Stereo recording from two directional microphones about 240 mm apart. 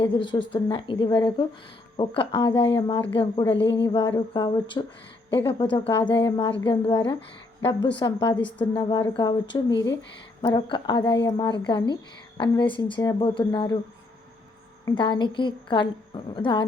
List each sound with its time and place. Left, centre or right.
0.0 s a woman's voice: centre
3.6 s speech: left
3.8 s a woman's voice: centre
8.4 s a woman's voice: centre
8.7 s a woman's voice: centre
14.8 s a woman's voice: centre